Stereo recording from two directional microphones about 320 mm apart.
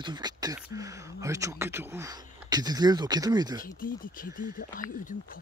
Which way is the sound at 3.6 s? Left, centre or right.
Left.